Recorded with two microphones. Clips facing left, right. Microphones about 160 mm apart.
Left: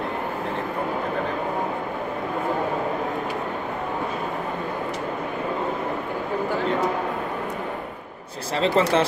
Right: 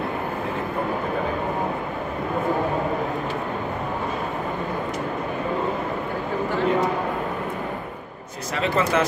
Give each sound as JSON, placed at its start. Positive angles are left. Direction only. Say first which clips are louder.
{"t": 8.5, "sound": "speech", "louder": "left 2 dB", "side_deg": 30}